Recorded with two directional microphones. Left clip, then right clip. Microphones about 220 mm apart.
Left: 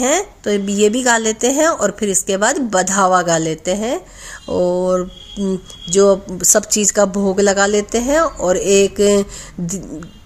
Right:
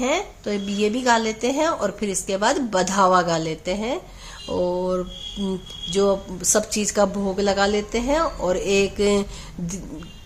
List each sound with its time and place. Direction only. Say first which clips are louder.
0.0 s speech: left 6 dB; 35° left (ahead or behind)
4.4 s mantra: left 7 dB; 30° left (ahead or behind)
5.9 s speech: left 8 dB; 30° left (ahead or behind)